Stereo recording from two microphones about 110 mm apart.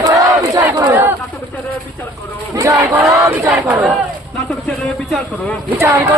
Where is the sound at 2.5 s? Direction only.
25° right (ahead or behind).